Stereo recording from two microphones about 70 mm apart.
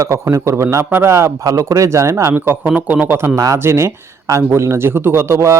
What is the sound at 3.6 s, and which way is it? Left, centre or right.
A man's voice, right.